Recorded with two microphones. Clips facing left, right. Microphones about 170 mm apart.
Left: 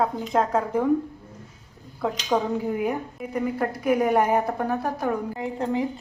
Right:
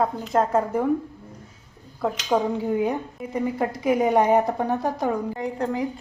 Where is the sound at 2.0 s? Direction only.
Centre (ahead or behind).